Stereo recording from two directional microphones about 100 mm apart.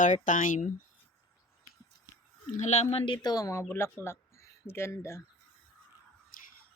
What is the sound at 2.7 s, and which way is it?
Speech, 85° left.